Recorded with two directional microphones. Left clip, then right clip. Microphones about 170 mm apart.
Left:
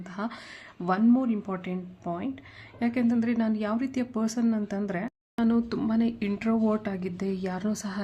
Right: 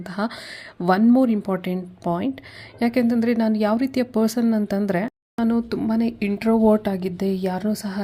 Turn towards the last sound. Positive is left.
turn(degrees=-15)  # may be behind; listen again after turning